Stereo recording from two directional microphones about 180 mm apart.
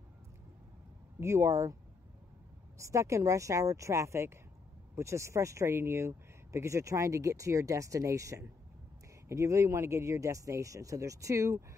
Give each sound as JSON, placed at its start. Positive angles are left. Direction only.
{"t": 1.2, "sound": "speech", "side_deg": -15}
{"t": 2.8, "sound": "speech", "side_deg": -15}